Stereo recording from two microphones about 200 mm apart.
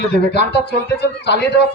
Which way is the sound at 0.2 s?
55° left (ahead or behind).